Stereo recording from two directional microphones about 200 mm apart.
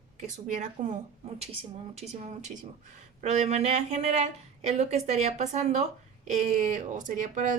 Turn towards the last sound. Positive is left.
turn(degrees=-35)  # may be behind; listen again after turning